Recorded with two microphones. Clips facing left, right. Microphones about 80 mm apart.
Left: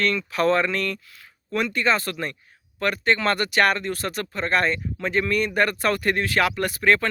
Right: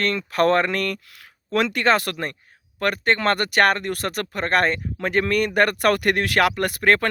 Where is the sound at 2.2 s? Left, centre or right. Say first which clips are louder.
Right 1 dB; right.